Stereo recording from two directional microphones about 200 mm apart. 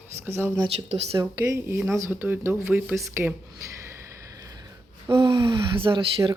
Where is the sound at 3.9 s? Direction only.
15° right (ahead or behind).